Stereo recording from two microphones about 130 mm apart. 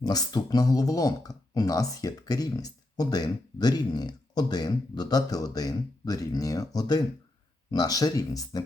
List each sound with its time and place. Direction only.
0.0 s speech: 30° left (ahead or behind)